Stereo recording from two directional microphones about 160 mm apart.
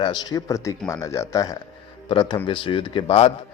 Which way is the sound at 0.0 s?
25° left (ahead or behind).